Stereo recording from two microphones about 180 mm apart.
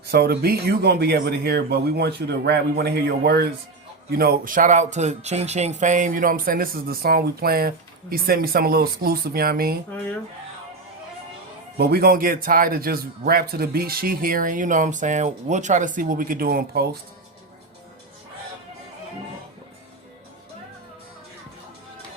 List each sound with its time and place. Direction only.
0.0 s a man's voice: 60° right (ahead or behind)
11.8 s a man's voice: 60° right (ahead or behind)